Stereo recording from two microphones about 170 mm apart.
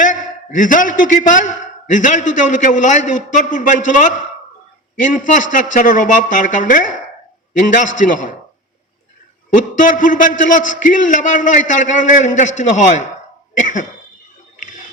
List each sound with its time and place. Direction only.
0.0 s a man's voice: 50° left (ahead or behind)
9.6 s a man's voice: 50° left (ahead or behind)